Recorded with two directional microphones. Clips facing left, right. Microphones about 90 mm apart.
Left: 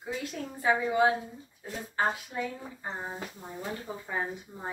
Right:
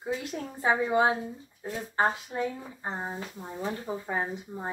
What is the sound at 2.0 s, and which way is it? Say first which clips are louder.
A woman's voice: right 3 dB; 30° right (ahead or behind).